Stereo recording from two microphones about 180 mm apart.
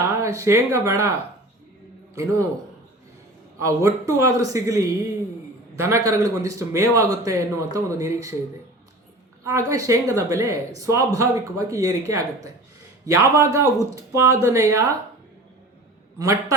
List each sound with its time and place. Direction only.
0.1 s speech: 15° right (ahead or behind)
3.6 s speech: 15° right (ahead or behind)
9.4 s speech: 15° right (ahead or behind)
16.1 s speech: 15° right (ahead or behind)